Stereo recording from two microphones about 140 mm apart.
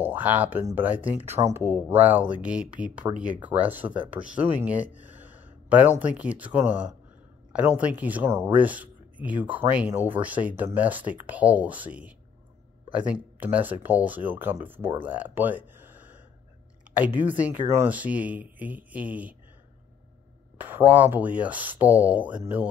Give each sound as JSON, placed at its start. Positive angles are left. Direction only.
{"t": 0.0, "sound": "speech", "side_deg": -15}
{"t": 14.8, "sound": "speech", "side_deg": -45}
{"t": 15.0, "sound": "speech", "side_deg": -15}
{"t": 20.5, "sound": "speech", "side_deg": -10}